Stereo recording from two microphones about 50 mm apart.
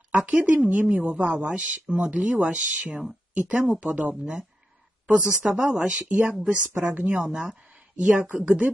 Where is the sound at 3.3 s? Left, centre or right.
Right.